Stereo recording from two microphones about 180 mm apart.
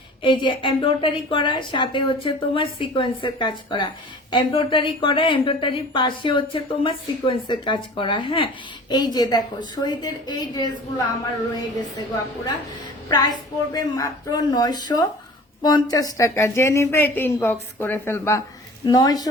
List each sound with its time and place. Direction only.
0.2 s a woman's voice: 30° left (ahead or behind)
13.1 s a woman's voice: 25° left (ahead or behind)